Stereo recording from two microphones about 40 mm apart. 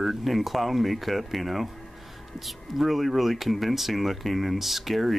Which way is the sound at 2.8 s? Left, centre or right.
Centre.